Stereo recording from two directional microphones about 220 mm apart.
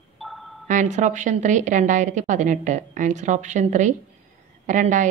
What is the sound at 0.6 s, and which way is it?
A woman's voice, 35° right (ahead or behind).